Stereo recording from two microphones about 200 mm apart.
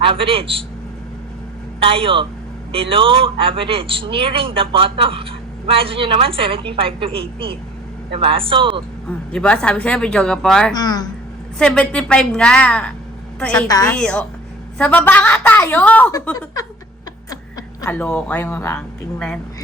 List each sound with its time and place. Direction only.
0.0 s speech: 25° right (ahead or behind)
1.8 s speech: 25° right (ahead or behind)
9.0 s speech: 5° left (ahead or behind)
10.8 s speech: 20° left (ahead or behind)
11.6 s a woman's voice: 5° left (ahead or behind)
16.1 s a woman's voice: 15° left (ahead or behind)
17.8 s a woman's voice: 10° left (ahead or behind)